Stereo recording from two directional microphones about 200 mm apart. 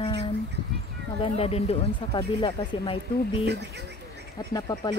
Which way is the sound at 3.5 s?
60° right (ahead or behind).